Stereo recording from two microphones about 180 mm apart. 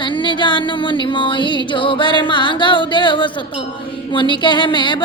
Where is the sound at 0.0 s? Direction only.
25° left (ahead or behind).